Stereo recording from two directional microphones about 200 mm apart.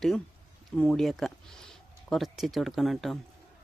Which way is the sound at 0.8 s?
5° left (ahead or behind).